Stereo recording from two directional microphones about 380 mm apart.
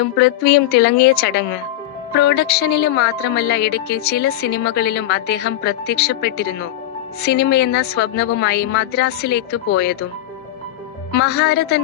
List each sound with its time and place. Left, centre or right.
0.0 s a woman's voice: left
11.1 s a woman's voice: left